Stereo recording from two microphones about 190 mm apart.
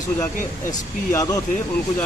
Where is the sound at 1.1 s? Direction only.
15° left (ahead or behind).